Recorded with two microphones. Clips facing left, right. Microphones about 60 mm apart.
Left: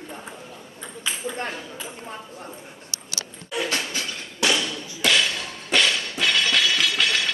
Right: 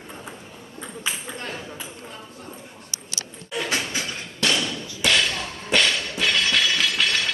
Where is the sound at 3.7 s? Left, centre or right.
Right.